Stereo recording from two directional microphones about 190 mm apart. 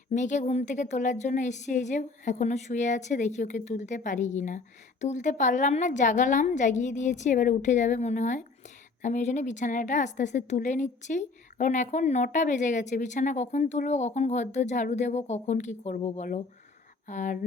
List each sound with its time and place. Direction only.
0.1 s a woman's voice: 40° left (ahead or behind)